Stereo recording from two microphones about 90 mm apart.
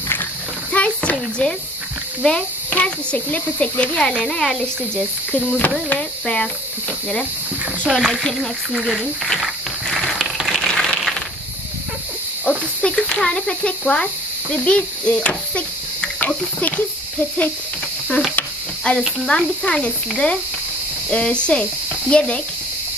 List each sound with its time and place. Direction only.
0.1 s a sound: 20° left (ahead or behind)
2.2 s speech: 10° left (ahead or behind)
8.0 s cricket: 5° left (ahead or behind)
12.4 s speech: 10° left (ahead or behind)
18.9 s speech: 10° left (ahead or behind)